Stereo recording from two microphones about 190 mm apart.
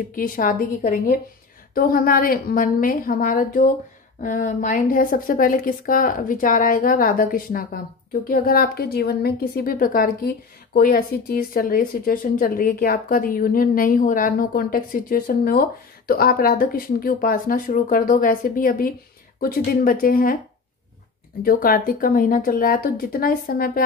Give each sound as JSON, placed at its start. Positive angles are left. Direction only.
{"t": 0.1, "sound": "speech", "side_deg": 45}
{"t": 21.4, "sound": "speech", "side_deg": 50}